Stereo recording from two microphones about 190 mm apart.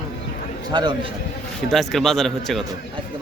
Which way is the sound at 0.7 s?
20° right (ahead or behind).